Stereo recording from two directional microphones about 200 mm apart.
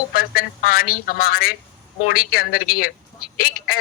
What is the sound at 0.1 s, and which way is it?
Speech, 45° left (ahead or behind).